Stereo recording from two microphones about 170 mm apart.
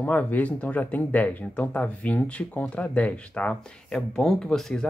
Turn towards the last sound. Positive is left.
turn(degrees=5)  # may be behind; listen again after turning